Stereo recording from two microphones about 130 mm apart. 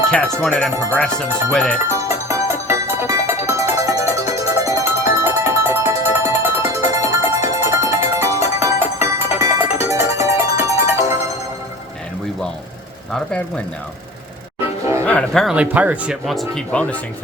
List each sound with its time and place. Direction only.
0.4 s speech: 5° left (ahead or behind)
1.9 s music: 20° right (ahead or behind)
15.0 s speech: 5° left (ahead or behind)
15.5 s speech: 10° right (ahead or behind); by 16.9 s 5° left (ahead or behind)